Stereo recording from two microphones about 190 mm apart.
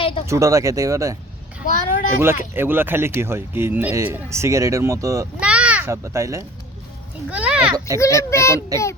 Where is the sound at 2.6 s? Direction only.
10° right (ahead or behind).